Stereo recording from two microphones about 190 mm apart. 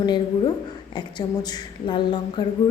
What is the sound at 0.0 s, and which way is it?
A woman's voice, 25° left (ahead or behind).